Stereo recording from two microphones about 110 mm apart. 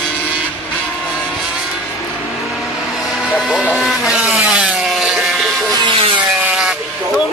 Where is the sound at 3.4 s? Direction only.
Centre (ahead or behind).